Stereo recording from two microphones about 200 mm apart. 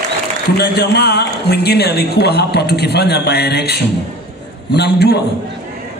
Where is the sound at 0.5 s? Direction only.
55° left (ahead or behind).